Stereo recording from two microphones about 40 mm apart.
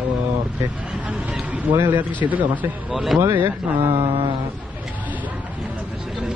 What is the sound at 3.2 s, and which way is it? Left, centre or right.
Speech, right.